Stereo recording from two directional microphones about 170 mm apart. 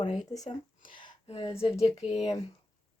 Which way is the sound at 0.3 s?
20° left (ahead or behind).